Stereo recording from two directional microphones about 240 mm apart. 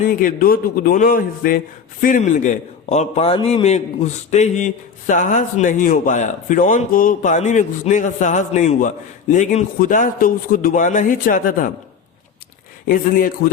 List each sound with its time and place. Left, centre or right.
0.0 s a man's voice: left
12.9 s a man's voice: left